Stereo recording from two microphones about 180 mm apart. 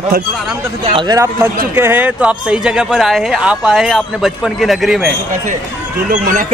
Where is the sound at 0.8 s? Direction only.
25° right (ahead or behind); by 5.1 s centre (ahead or behind).